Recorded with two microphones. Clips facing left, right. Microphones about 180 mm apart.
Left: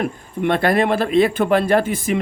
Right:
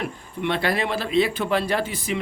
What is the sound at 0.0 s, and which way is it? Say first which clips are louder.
A man's voice: left 6 dB; 50° left (ahead or behind).